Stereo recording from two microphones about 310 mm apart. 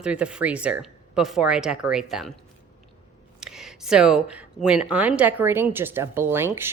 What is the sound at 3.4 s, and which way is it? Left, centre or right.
A woman's voice, centre.